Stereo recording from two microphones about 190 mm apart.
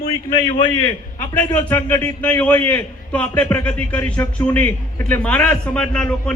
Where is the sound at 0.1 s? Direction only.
20° left (ahead or behind).